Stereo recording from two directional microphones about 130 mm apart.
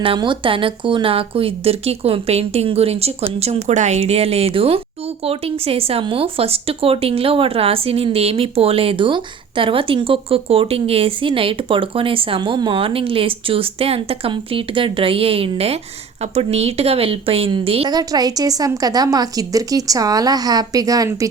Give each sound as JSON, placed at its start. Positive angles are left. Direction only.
{"t": 0.0, "sound": "a woman's voice", "side_deg": -40}
{"t": 17.8, "sound": "a woman's voice", "side_deg": -30}